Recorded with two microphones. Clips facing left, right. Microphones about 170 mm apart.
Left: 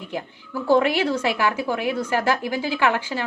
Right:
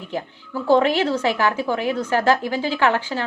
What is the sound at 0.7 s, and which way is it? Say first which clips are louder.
A woman's voice: right 2 dB; 10° left (ahead or behind).